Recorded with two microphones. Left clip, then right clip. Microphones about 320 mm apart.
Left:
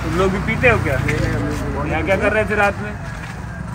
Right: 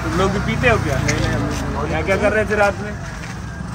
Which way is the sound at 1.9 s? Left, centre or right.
Left.